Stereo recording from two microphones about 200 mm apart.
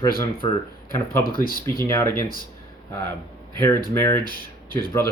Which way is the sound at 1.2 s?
45° left (ahead or behind).